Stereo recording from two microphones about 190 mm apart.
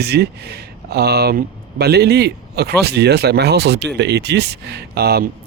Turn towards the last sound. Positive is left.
turn(degrees=-55)  # may be behind; listen again after turning